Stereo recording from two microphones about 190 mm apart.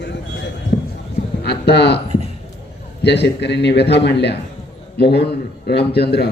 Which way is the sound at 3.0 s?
65° left (ahead or behind).